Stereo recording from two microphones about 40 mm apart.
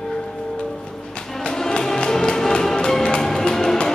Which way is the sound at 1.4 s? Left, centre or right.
Centre.